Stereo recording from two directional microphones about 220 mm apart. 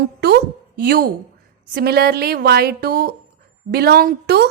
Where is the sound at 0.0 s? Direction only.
50° right (ahead or behind).